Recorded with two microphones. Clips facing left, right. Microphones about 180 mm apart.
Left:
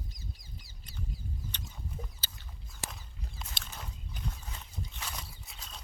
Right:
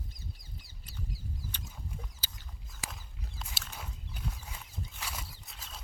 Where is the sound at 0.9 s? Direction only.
5° right (ahead or behind).